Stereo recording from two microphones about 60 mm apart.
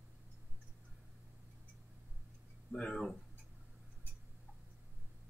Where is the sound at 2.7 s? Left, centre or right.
Centre.